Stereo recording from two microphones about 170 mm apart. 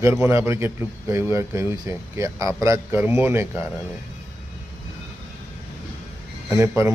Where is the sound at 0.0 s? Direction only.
15° right (ahead or behind).